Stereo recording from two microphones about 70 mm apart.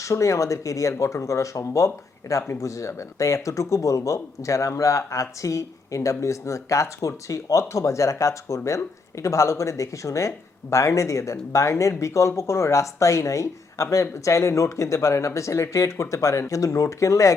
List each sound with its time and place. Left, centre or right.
0.0 s speech: left